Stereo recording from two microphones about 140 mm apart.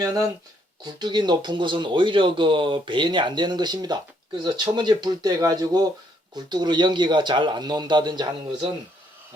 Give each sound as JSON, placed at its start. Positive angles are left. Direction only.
{"t": 0.9, "sound": "speech", "side_deg": -30}